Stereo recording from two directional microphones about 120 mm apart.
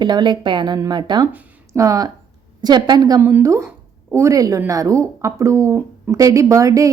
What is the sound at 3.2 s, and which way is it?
Speech, 20° right (ahead or behind).